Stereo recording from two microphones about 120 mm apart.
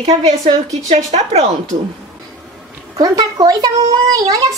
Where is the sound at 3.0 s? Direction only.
30° right (ahead or behind).